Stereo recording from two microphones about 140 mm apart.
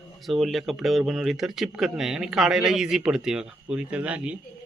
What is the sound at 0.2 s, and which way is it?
A man's voice, centre (ahead or behind).